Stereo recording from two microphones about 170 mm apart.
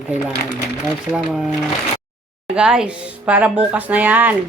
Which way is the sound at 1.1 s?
5° right (ahead or behind).